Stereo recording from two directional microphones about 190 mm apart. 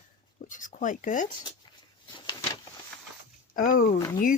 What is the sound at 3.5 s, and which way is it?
Speech, 50° left (ahead or behind).